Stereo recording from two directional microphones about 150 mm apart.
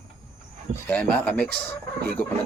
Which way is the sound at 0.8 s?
10° left (ahead or behind).